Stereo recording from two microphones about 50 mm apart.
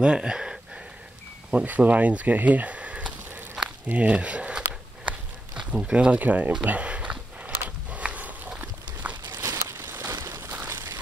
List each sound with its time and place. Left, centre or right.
0.0 s speech: centre
1.5 s speech: right
3.8 s walk: right
5.6 s speech: centre
6.1 s speech: right
6.6 s walk: right
9.3 s a sound: right